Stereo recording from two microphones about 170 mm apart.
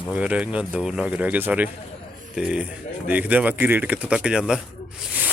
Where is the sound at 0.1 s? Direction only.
5° right (ahead or behind).